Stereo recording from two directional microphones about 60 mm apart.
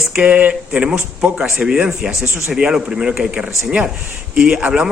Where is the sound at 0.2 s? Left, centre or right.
Right.